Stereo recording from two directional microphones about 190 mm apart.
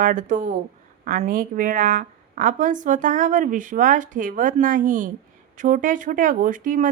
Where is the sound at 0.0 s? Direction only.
45° right (ahead or behind).